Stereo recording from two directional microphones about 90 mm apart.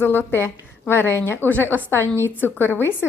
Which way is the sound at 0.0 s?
25° left (ahead or behind).